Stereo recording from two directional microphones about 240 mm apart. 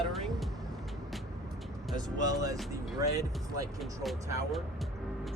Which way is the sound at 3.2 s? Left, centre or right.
Centre.